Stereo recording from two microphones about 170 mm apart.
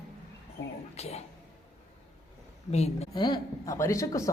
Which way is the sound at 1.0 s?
40° left (ahead or behind).